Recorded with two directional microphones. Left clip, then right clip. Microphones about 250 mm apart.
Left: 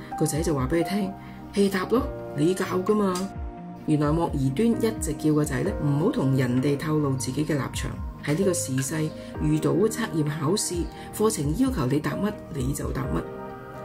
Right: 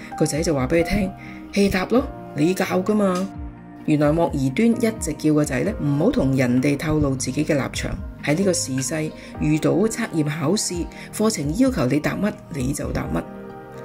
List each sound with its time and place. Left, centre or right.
0.2 s speech: centre